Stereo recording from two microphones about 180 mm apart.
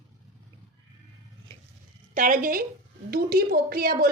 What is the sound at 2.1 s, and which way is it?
A woman's voice, 50° right (ahead or behind).